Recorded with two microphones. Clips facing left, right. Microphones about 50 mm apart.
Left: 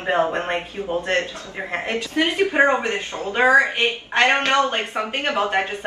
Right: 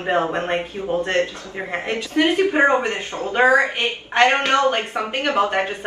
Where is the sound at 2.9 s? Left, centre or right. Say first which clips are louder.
Right 1 dB; right.